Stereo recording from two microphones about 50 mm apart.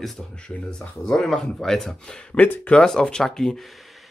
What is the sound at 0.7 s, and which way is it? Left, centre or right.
Speech, centre.